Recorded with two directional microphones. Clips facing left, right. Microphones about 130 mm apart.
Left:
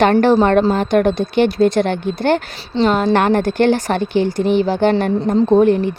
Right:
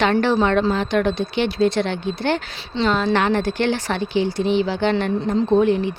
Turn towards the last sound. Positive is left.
turn(degrees=45)  # may be behind; listen again after turning